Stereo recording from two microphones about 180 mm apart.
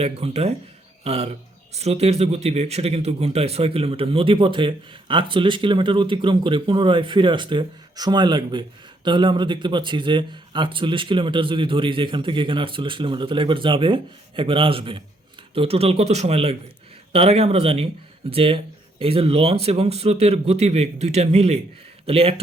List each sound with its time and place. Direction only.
0.0 s a man's voice: 35° right (ahead or behind)